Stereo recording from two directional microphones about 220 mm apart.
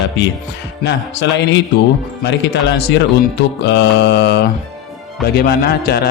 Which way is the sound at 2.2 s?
50° left (ahead or behind).